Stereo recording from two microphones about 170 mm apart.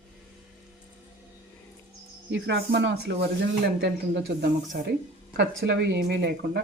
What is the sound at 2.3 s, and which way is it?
Speech, 85° right.